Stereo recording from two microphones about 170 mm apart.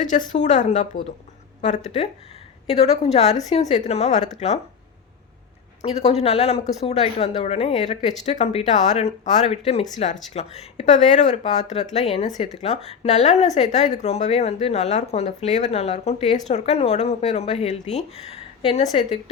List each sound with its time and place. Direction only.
0.0 s speech: 50° left (ahead or behind)
5.8 s speech: 40° left (ahead or behind)